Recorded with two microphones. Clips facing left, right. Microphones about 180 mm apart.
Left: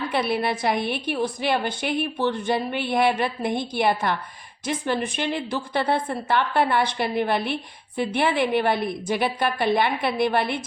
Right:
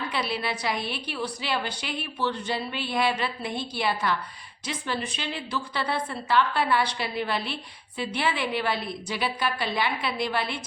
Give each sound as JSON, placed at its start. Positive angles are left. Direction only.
{"t": 0.1, "sound": "a woman's voice", "side_deg": 55}